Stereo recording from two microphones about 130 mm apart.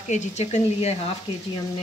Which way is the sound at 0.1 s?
60° left (ahead or behind).